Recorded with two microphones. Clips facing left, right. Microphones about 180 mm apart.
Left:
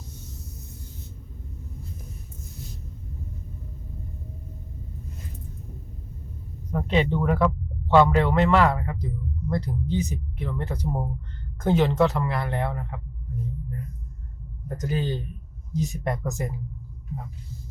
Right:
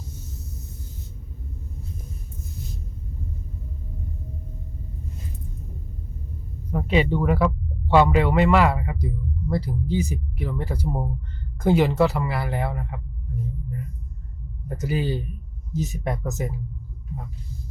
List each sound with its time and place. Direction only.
6.7 s a man's voice: 5° right (ahead or behind)
14.7 s speech: 10° right (ahead or behind)